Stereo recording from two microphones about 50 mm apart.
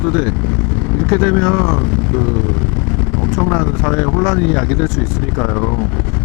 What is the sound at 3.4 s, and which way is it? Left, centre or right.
Speech, left.